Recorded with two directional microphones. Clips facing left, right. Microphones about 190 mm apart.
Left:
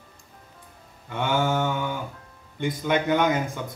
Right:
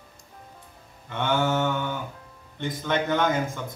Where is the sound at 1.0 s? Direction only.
10° left (ahead or behind).